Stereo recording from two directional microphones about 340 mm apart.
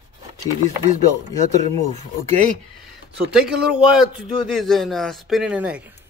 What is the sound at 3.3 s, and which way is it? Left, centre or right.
A man's voice, centre.